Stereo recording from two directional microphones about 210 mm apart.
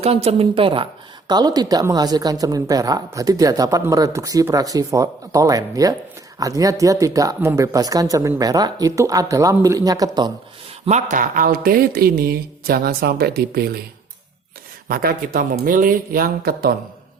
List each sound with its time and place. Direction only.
0.0 s a woman's voice: 30° right (ahead or behind)
10.8 s speech: 35° right (ahead or behind)
14.8 s speech: 45° right (ahead or behind)